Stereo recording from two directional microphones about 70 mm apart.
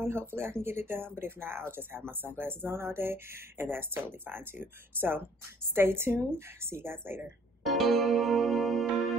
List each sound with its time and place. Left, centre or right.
0.0 s speech: right
7.6 s music: centre